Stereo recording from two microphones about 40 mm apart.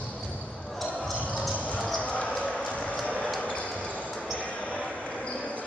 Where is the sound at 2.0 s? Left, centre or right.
Left.